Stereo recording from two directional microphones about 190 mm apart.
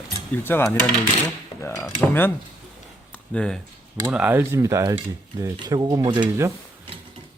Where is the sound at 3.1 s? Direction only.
5° left (ahead or behind).